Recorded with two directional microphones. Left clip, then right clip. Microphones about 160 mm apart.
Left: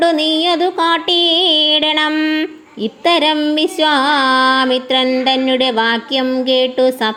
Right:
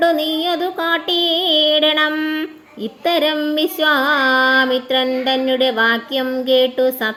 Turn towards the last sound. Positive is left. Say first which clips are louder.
# left 2 dB
turn(degrees=25)  # may be behind; listen again after turning